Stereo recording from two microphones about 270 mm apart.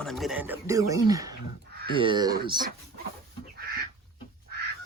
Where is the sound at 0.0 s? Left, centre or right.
Centre.